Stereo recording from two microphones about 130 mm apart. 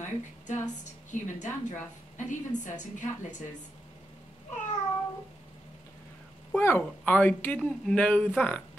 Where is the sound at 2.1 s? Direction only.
70° left (ahead or behind).